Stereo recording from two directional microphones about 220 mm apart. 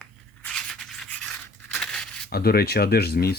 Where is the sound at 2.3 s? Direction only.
45° left (ahead or behind).